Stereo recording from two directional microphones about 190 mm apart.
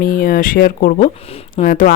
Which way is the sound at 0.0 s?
45° left (ahead or behind).